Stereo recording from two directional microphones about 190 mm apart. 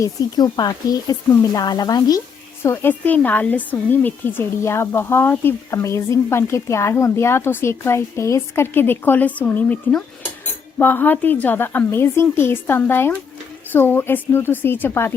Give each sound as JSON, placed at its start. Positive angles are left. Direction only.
{"t": 0.0, "sound": "a woman's voice", "side_deg": 20}